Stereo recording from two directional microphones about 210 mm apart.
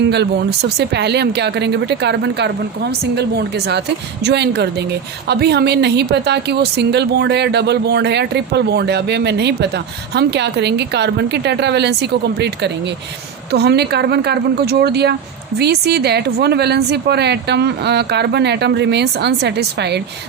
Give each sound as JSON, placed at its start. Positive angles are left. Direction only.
{"t": 0.0, "sound": "speech", "side_deg": -50}